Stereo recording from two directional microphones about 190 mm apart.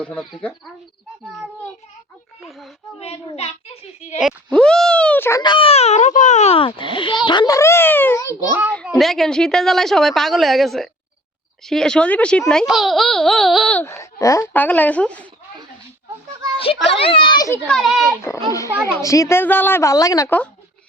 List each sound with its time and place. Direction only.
0.0 s a child's voice: 5° left (ahead or behind)
2.4 s a child's voice: centre (ahead or behind)
3.0 s a woman's voice: 30° left (ahead or behind)
4.2 s a child's voice: centre (ahead or behind)
5.4 s a child's voice: 25° left (ahead or behind)
9.0 s a child's voice: centre (ahead or behind)
16.9 s a child's voice: 30° left (ahead or behind)
17.7 s a child's voice: centre (ahead or behind)
18.4 s a woman's voice: 15° left (ahead or behind)